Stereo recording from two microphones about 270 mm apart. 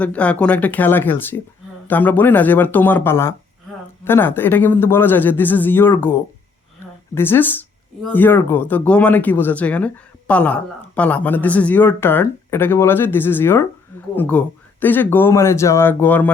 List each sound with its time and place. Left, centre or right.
0.0 s speech: centre